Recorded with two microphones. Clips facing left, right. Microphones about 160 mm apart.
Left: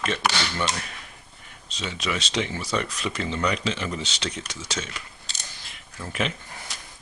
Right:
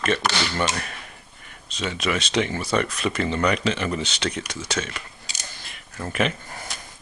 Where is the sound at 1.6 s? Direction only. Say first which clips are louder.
Right 4 dB; 55° right (ahead or behind).